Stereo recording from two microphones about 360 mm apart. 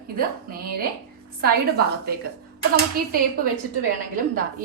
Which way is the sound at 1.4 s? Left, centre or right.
Right.